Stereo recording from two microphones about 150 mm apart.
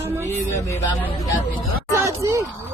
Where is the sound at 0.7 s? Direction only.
15° left (ahead or behind).